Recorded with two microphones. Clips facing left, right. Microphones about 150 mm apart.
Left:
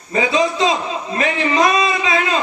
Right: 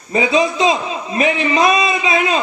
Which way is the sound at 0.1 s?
15° right (ahead or behind).